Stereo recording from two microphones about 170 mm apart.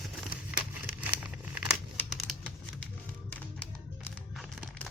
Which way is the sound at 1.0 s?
10° right (ahead or behind).